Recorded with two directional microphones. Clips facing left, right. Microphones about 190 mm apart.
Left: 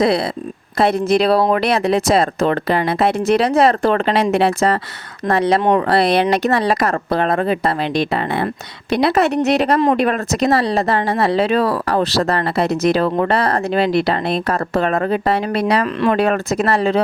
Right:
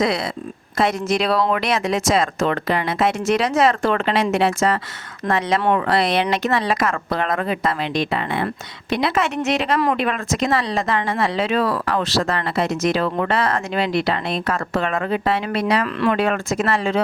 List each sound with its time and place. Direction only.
1.0 s speech: 35° left (ahead or behind)